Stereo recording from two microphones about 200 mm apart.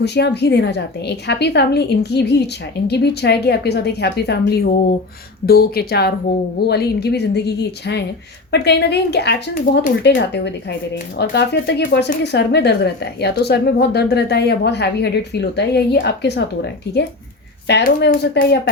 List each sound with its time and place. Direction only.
0.0 s speech: 55° left (ahead or behind)
17.7 s speech: 55° left (ahead or behind)